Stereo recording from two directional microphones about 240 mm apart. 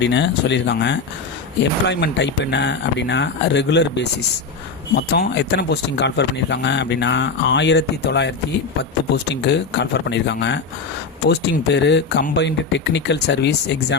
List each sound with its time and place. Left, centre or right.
0.0 s speech: left